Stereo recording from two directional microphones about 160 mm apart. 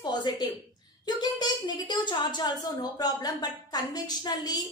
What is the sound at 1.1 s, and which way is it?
A woman's voice, 25° left (ahead or behind).